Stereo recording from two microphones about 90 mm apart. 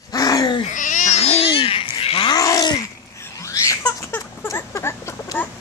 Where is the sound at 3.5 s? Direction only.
35° left (ahead or behind).